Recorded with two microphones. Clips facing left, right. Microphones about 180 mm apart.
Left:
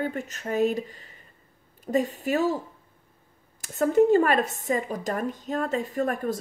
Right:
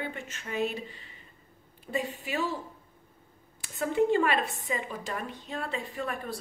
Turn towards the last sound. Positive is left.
turn(degrees=45)  # may be behind; listen again after turning